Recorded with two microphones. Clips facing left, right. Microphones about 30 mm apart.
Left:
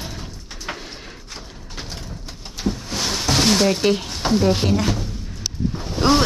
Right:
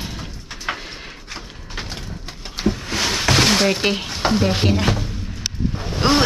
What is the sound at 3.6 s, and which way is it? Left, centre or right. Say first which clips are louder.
Speech: left 1 dB; right.